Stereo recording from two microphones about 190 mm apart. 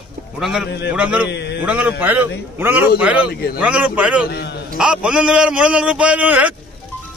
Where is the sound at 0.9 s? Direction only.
5° right (ahead or behind).